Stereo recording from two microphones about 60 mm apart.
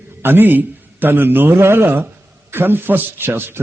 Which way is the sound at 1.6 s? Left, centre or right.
Right.